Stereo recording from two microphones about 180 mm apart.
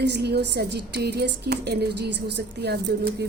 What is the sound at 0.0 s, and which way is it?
A woman's voice, 70° right (ahead or behind).